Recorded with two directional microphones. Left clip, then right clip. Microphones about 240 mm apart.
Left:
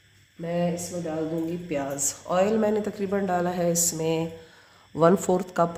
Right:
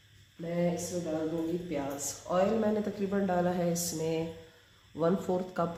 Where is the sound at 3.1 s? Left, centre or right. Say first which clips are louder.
Left 4 dB; left.